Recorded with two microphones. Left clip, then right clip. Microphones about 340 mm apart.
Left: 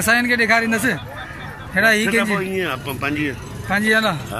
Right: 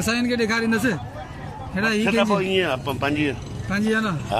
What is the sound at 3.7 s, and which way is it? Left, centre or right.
Speech, centre.